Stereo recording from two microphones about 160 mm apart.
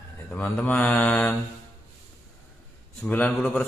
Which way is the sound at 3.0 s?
5° left (ahead or behind).